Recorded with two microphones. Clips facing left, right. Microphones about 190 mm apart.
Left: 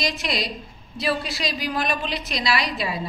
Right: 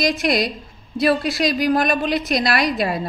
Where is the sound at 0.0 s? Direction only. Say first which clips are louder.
Right 8 dB; 50° right (ahead or behind).